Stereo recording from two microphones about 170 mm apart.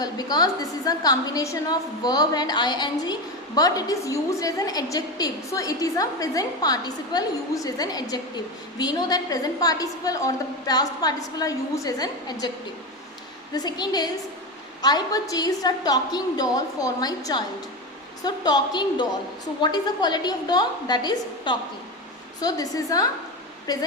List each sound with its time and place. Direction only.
0.0 s a woman's voice: 25° left (ahead or behind)
13.5 s a woman's voice: 25° left (ahead or behind)